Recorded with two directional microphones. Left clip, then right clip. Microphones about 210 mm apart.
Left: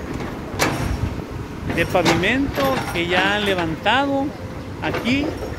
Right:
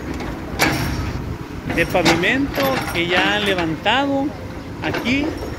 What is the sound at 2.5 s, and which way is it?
Speech, 30° right (ahead or behind).